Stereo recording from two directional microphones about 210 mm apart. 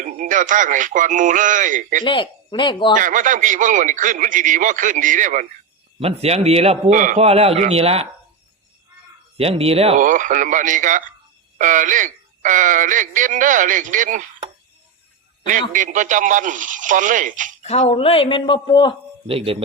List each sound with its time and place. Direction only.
0.0 s speech: 35° right (ahead or behind)
2.0 s speech: 25° left (ahead or behind)
2.9 s a man's voice: 40° right (ahead or behind)
9.4 s speech: 30° right (ahead or behind)
15.7 s speech: 35° right (ahead or behind)
17.6 s speech: 30° left (ahead or behind)
19.3 s a man's voice: 25° right (ahead or behind)